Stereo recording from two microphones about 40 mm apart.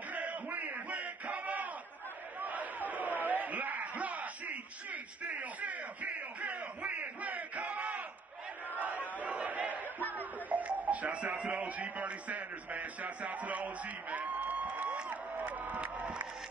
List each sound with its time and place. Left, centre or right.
0.1 s a sound: right
8.7 s chatter: right
9.2 s crowd: right
10.5 s music: right
11.3 s speech: right
14.1 s a sound: right